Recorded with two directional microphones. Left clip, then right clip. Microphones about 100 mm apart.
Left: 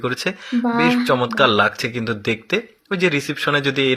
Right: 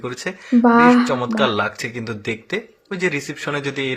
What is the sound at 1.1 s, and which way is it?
Speech, 25° left (ahead or behind).